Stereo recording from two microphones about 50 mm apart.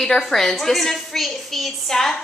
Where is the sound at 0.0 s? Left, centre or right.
Centre.